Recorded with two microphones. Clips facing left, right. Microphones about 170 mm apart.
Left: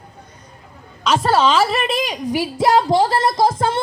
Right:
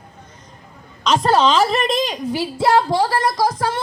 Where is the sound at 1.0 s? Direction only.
5° left (ahead or behind); by 3.8 s 25° left (ahead or behind).